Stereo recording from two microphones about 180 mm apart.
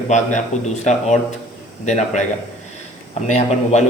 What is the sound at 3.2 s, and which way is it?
Speech, 40° left (ahead or behind).